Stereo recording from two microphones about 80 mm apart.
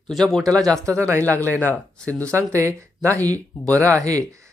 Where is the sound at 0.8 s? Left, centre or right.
Right.